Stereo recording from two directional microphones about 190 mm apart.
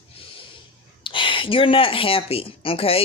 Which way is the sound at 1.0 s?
25° left (ahead or behind).